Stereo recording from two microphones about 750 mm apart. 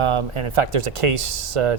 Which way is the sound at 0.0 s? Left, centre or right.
Right.